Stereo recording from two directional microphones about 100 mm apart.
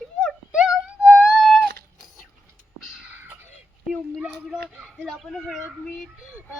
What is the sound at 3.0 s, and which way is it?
Whispering, 15° right (ahead or behind).